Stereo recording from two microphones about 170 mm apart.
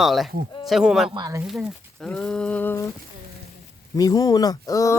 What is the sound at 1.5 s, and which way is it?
Speech, centre (ahead or behind).